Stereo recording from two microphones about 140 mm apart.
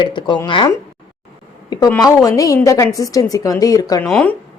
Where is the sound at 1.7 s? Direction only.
25° left (ahead or behind).